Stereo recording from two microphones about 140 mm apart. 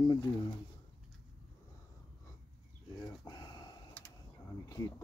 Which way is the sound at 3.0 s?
30° left (ahead or behind).